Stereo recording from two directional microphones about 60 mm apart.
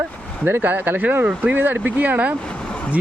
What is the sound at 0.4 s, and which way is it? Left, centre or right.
Speech, right.